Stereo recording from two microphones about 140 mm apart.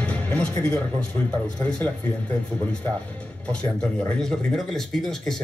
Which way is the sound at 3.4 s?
5° left (ahead or behind).